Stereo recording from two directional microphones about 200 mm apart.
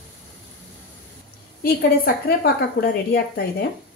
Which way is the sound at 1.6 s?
50° left (ahead or behind).